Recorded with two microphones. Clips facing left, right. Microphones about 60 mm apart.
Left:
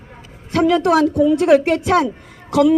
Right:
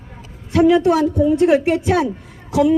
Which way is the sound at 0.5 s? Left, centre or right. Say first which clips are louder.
Right 1 dB; left.